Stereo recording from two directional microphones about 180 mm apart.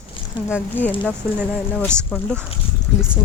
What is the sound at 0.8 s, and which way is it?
Speech, 10° left (ahead or behind).